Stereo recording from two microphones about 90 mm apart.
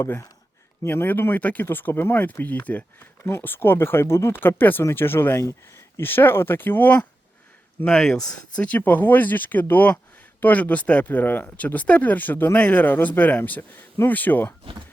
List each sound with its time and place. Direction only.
0.0 s speech: 30° left (ahead or behind)